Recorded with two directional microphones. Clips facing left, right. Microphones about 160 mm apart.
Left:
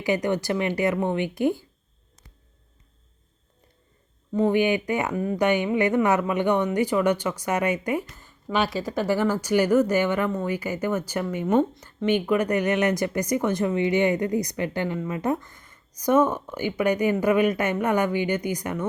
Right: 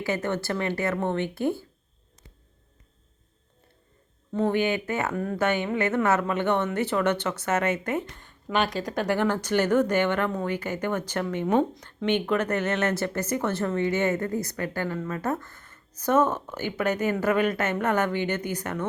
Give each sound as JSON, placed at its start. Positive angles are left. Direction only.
{"t": 0.0, "sound": "speech", "side_deg": 15}
{"t": 4.3, "sound": "speech", "side_deg": 10}